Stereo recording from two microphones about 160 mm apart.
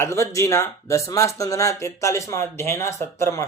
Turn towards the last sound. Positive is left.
turn(degrees=15)  # may be behind; listen again after turning